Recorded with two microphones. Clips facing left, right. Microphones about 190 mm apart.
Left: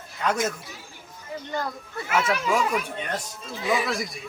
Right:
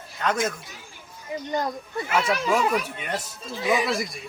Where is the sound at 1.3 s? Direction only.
20° right (ahead or behind).